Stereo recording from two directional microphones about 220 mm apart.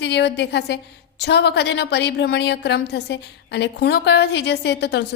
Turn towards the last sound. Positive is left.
turn(degrees=50)  # may be behind; listen again after turning